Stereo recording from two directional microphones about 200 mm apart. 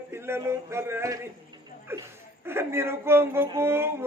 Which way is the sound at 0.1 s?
10° right (ahead or behind).